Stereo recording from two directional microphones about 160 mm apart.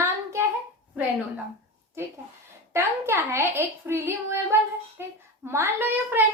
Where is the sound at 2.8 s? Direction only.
15° right (ahead or behind).